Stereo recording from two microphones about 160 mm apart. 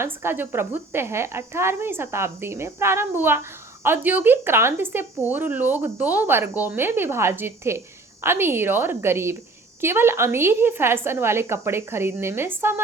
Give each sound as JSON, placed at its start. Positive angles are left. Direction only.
{"t": 0.0, "sound": "speech", "side_deg": -15}